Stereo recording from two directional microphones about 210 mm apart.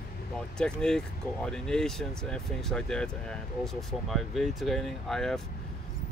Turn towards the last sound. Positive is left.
turn(degrees=0)  # may be behind; listen again after turning